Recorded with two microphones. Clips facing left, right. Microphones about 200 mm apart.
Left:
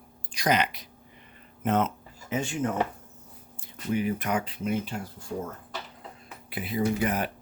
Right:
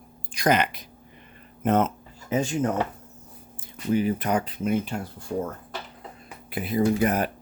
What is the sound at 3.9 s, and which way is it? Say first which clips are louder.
Speech: right 4 dB; 35° right (ahead or behind).